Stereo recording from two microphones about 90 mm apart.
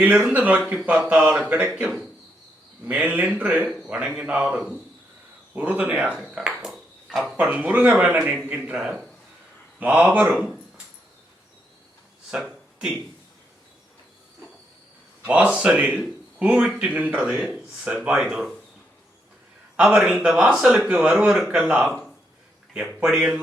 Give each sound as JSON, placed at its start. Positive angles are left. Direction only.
{"t": 0.3, "sound": "speech", "side_deg": -20}
{"t": 2.8, "sound": "speech", "side_deg": -20}
{"t": 7.3, "sound": "speech", "side_deg": -15}
{"t": 8.7, "sound": "a man's voice", "side_deg": -5}
{"t": 12.4, "sound": "a sound", "side_deg": -5}
{"t": 15.3, "sound": "speech", "side_deg": -15}
{"t": 19.7, "sound": "speech", "side_deg": -10}